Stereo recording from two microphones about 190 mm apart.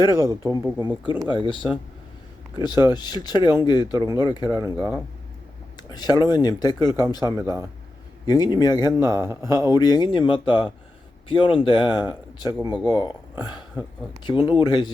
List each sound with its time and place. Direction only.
0.0 s speech: 20° left (ahead or behind)
4.6 s speech: 10° right (ahead or behind)
5.7 s speech: 20° left (ahead or behind)
7.3 s speech: 15° right (ahead or behind)
8.3 s speech: 20° left (ahead or behind)
9.1 s speech: 10° right (ahead or behind)
9.4 s speech: 20° left (ahead or behind)